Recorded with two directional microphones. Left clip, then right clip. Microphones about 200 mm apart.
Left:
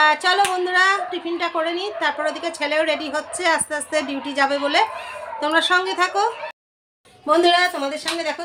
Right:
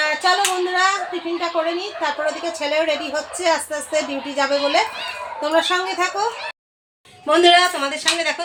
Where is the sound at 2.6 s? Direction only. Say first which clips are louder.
Even; 15° left (ahead or behind).